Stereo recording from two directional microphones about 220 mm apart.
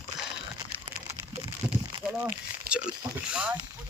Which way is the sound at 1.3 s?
30° right (ahead or behind).